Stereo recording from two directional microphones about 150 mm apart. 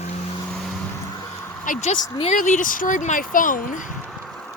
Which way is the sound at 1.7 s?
60° left (ahead or behind).